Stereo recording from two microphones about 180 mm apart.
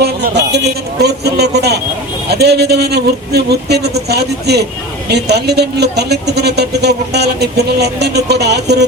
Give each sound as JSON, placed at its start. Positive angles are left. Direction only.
{"t": 0.0, "sound": "speech", "side_deg": -65}